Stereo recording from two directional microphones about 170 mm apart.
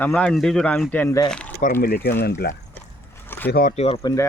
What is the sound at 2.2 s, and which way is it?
Speech, 70° left (ahead or behind).